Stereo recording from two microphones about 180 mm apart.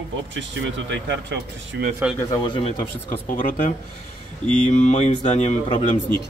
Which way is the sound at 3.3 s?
45° left (ahead or behind).